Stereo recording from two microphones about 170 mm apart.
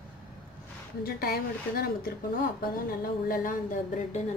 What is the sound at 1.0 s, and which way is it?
A woman's voice, 60° left (ahead or behind).